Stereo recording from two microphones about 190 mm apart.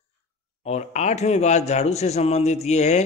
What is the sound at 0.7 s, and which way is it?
Speech, 35° left (ahead or behind).